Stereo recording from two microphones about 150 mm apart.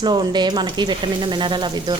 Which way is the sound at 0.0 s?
30° right (ahead or behind).